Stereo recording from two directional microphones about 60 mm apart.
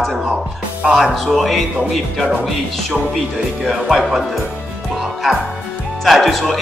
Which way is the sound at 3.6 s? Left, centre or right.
Centre.